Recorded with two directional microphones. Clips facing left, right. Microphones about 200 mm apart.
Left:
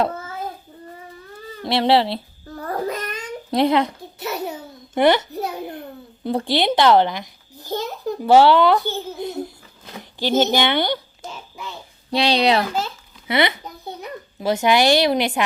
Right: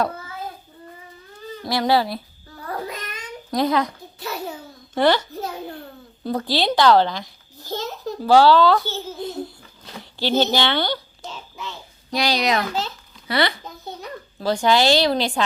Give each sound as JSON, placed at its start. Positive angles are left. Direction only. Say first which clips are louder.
{"t": 1.6, "sound": "a child's voice", "louder": "left 3 dB", "side_deg": 25}
{"t": 2.6, "sound": "babbling", "louder": "left 5 dB", "side_deg": 45}
{"t": 3.5, "sound": "a child's voice", "louder": "left 3 dB", "side_deg": 25}
{"t": 11.2, "sound": "a sound", "louder": "even", "side_deg": 5}
{"t": 12.1, "sound": "a child's voice", "louder": "left 4 dB", "side_deg": 30}
{"t": 12.6, "sound": "a child's voice", "louder": "left 1 dB", "side_deg": 10}
{"t": 13.2, "sound": "babbling", "louder": "left 2 dB", "side_deg": 20}